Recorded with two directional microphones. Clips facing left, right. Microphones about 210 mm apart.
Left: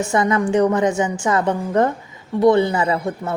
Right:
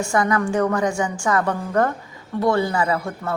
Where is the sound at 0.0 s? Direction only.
20° left (ahead or behind).